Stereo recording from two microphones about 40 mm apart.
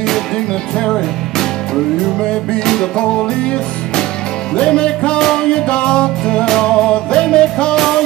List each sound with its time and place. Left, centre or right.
0.7 s music: centre
2.6 s music: centre
4.6 s music: left
5.2 s music: centre
5.5 s music: left